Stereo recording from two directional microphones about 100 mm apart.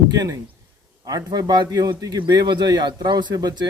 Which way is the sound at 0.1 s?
40° right (ahead or behind).